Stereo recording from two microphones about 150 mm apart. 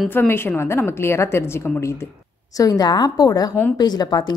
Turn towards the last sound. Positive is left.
turn(degrees=25)  # may be behind; listen again after turning